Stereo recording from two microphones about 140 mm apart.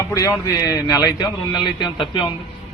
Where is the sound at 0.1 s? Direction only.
25° left (ahead or behind).